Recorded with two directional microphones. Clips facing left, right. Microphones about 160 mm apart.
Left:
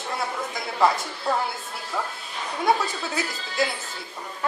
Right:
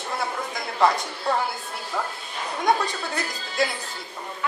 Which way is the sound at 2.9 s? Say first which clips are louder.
Even; 5° left (ahead or behind).